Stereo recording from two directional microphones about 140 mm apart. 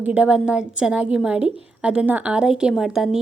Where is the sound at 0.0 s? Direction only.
10° right (ahead or behind).